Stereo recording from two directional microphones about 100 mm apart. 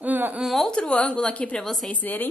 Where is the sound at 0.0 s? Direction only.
15° right (ahead or behind).